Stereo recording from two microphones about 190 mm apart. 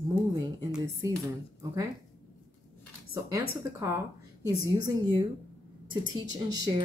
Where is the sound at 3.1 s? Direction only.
15° right (ahead or behind).